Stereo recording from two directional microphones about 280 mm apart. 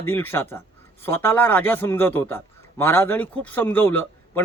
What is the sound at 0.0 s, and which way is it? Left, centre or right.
A man's voice, centre.